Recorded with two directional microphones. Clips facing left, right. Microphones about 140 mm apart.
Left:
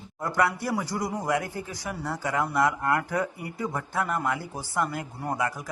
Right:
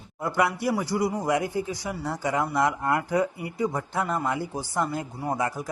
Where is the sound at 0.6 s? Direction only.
10° right (ahead or behind).